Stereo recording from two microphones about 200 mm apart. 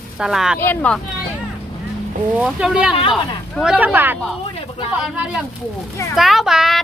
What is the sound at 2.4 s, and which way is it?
Speech, 5° right (ahead or behind).